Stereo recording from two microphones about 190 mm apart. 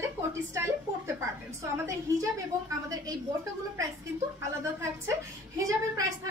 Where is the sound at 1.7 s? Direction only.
15° right (ahead or behind).